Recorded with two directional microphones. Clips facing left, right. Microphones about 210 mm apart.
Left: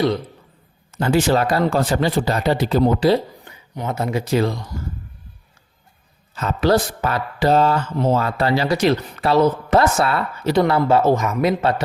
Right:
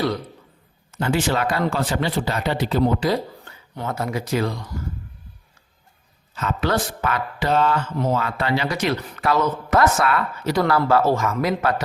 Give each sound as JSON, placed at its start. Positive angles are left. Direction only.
{"t": 0.9, "sound": "speech", "side_deg": 40}
{"t": 3.2, "sound": "speech", "side_deg": 15}
{"t": 6.3, "sound": "speech", "side_deg": 35}